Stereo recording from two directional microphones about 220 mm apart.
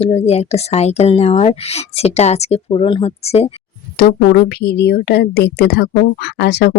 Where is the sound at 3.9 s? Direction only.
45° left (ahead or behind).